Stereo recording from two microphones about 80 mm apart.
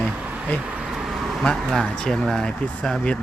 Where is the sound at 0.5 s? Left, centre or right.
Centre.